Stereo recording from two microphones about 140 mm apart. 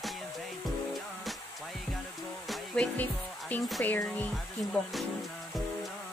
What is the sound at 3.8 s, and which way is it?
Speech, 15° left (ahead or behind).